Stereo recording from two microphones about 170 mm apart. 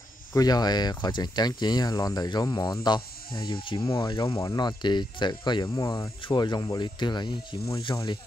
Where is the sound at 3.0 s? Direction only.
60° left (ahead or behind).